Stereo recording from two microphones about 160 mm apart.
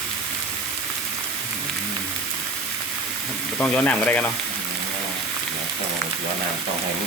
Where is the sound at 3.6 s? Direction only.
10° left (ahead or behind).